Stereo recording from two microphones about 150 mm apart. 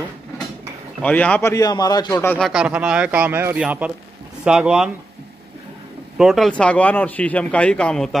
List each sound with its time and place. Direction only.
1.0 s a man's voice: 10° left (ahead or behind)
1.5 s speech: 25° left (ahead or behind)
2.1 s a man's voice: 15° left (ahead or behind)
2.4 s speech: 5° right (ahead or behind)
6.1 s speech: centre (ahead or behind)
6.6 s a man's voice: 10° left (ahead or behind)